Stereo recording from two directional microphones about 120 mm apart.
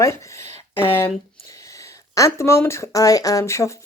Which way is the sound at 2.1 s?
25° left (ahead or behind).